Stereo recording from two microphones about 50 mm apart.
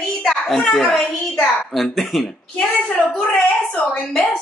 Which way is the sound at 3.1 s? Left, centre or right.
Centre.